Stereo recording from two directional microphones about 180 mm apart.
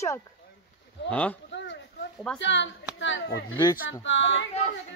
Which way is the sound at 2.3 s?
90° left.